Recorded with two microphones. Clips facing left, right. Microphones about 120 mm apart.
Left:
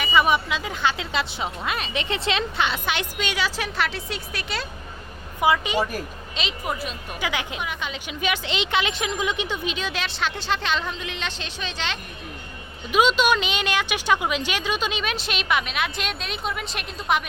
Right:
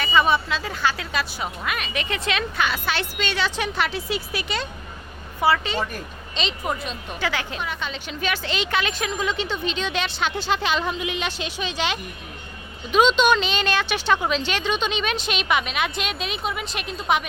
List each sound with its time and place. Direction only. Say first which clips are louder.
0.0 s a woman's voice: even; 10° left (ahead or behind)
5.4 s a woman's voice: even; 15° left (ahead or behind); by 11.9 s 10° right (ahead or behind)
12.9 s speech: right 2 dB; 10° left (ahead or behind)